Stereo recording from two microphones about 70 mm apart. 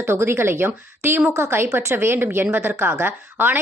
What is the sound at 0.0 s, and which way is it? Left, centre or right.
A woman's voice, right.